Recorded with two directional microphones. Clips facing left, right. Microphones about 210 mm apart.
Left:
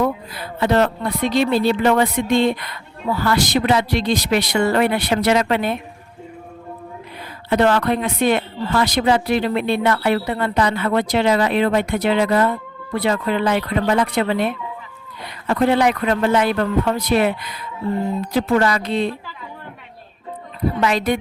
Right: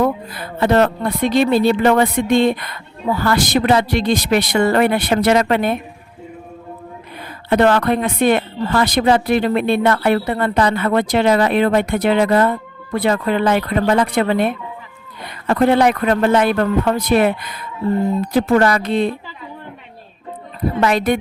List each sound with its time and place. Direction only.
0.0 s speech: 50° right (ahead or behind)
7.5 s speech: 55° right (ahead or behind)
20.8 s speech: 55° right (ahead or behind)